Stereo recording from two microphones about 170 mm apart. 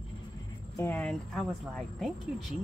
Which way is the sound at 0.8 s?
10° left (ahead or behind).